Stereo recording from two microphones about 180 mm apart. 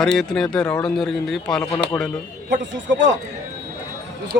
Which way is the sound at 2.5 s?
80° right.